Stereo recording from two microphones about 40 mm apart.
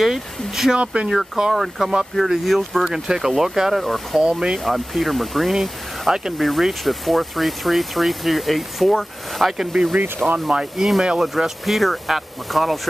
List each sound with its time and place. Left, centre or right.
0.0 s speech: centre
0.7 s speech: right
1.5 s speech: centre
2.8 s speech: centre
3.8 s speech: centre
4.2 s speech: centre
4.6 s speech: centre
6.3 s speech: centre
9.6 s speech: centre